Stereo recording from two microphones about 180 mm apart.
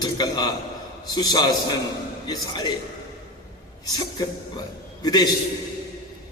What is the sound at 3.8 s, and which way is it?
A man's voice, 25° left (ahead or behind).